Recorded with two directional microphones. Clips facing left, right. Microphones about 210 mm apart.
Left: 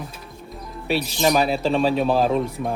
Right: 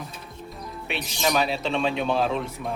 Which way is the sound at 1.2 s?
40° left (ahead or behind).